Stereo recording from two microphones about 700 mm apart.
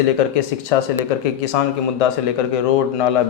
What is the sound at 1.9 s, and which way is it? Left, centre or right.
Speech, left.